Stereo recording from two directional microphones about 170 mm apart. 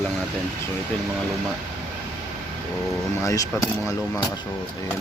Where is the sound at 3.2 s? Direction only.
20° left (ahead or behind).